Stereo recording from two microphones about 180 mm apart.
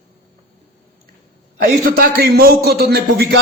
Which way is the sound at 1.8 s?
55° right (ahead or behind).